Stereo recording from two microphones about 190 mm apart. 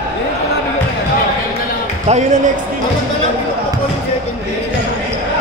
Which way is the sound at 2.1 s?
35° right (ahead or behind).